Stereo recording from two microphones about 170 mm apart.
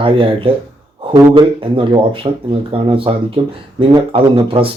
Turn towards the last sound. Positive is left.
turn(degrees=-30)  # may be behind; listen again after turning